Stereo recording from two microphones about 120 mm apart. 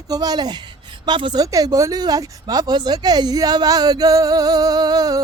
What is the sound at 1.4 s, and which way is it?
Speech, 30° right (ahead or behind).